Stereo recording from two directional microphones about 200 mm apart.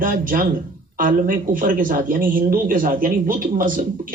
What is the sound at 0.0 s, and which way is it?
A man's voice, 40° right (ahead or behind).